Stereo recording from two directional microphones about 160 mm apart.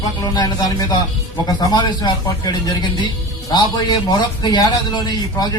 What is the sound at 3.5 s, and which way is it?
Speech, 25° left (ahead or behind).